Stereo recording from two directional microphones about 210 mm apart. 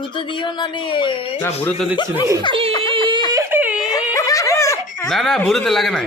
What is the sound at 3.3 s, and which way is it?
Whimper, 10° right (ahead or behind).